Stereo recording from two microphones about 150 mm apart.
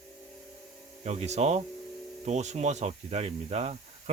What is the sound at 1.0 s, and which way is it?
Speech, 45° right (ahead or behind).